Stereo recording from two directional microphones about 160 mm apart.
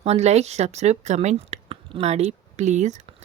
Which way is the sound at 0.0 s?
40° right (ahead or behind).